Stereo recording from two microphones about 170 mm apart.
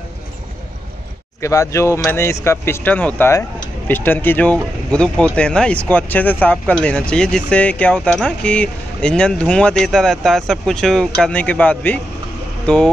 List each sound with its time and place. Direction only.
1.4 s speech: 20° left (ahead or behind)